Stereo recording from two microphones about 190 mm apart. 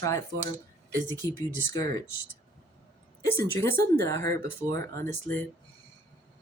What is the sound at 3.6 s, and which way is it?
A woman's voice, 10° left (ahead or behind).